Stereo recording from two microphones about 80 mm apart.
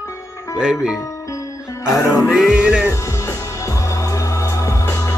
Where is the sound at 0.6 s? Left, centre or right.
Centre.